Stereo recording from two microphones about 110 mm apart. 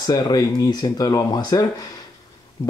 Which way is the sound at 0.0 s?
35° left (ahead or behind).